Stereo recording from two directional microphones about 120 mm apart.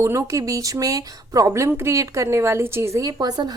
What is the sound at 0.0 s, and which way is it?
A woman's voice, 25° right (ahead or behind).